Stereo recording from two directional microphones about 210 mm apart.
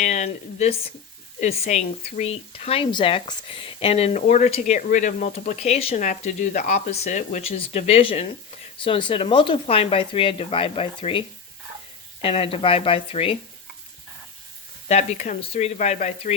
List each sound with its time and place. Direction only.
0.0 s speech: 35° left (ahead or behind)
12.2 s speech: 25° left (ahead or behind)
14.8 s speech: 30° left (ahead or behind)